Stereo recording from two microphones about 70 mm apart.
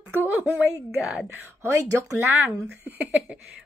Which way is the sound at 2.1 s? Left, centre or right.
Right.